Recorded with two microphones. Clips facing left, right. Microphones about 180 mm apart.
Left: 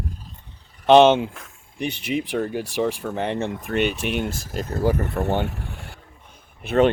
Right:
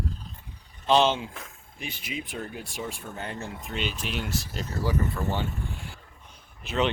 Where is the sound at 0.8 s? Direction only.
70° left (ahead or behind).